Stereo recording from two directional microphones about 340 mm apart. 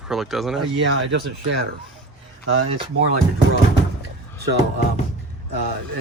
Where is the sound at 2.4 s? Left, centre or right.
Right.